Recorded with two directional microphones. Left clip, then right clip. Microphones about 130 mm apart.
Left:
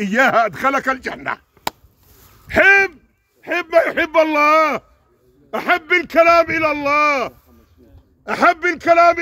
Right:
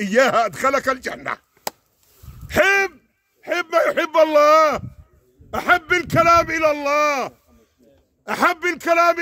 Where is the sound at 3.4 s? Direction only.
40° right (ahead or behind).